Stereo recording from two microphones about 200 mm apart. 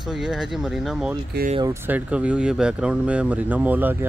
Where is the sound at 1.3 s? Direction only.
55° right (ahead or behind).